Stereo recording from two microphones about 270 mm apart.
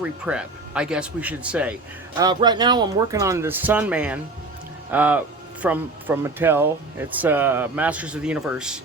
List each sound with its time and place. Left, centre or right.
0.0 s speech: centre